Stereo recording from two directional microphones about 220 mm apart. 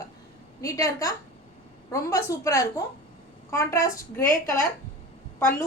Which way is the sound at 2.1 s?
15° left (ahead or behind).